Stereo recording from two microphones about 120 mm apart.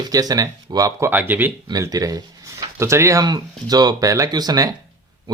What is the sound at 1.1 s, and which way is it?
Speech, 15° right (ahead or behind).